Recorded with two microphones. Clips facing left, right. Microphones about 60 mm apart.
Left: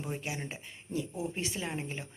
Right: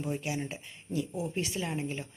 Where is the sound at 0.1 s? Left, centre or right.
Left.